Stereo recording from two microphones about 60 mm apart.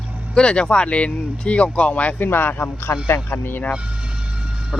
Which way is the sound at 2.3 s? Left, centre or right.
Left.